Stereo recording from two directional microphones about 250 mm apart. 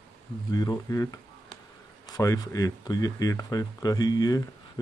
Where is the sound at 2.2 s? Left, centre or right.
Centre.